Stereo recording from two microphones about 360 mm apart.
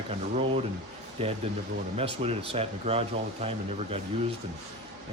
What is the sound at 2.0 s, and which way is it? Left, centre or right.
Speech, centre.